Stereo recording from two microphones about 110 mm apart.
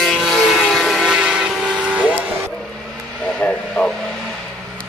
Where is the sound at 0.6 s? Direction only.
Centre (ahead or behind).